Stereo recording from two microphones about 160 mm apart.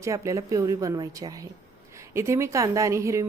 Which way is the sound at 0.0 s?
20° right (ahead or behind).